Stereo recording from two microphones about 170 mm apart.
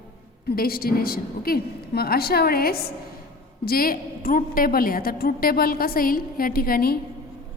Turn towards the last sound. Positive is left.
turn(degrees=65)  # may be behind; listen again after turning